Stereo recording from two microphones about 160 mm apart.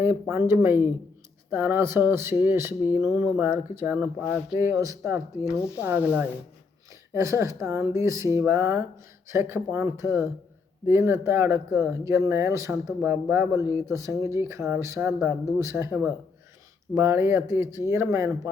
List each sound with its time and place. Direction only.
0.0 s speech: 15° right (ahead or behind)